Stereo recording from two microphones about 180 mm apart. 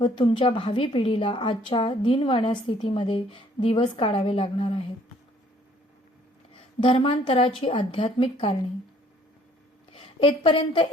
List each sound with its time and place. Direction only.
0.0 s a woman's voice: 30° left (ahead or behind)
6.5 s a woman's voice: 30° left (ahead or behind)
9.9 s a woman's voice: 35° left (ahead or behind)